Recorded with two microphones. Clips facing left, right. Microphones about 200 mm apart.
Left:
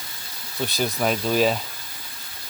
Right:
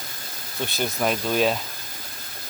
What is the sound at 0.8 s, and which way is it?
Speech, centre (ahead or behind).